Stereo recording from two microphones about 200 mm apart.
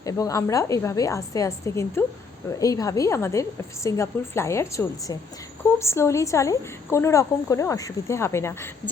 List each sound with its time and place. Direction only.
0.0 s a woman's voice: 15° left (ahead or behind)